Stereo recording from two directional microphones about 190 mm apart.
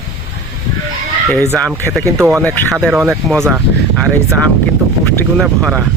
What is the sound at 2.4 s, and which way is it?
Speech, 5° left (ahead or behind).